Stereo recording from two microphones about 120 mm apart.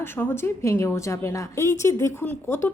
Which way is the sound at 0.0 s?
20° left (ahead or behind).